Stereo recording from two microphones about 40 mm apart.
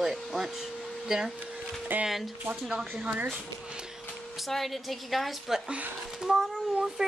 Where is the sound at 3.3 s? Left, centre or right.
Right.